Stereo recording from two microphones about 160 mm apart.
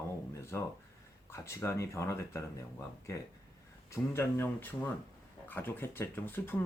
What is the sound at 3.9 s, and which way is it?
Speech, 15° left (ahead or behind).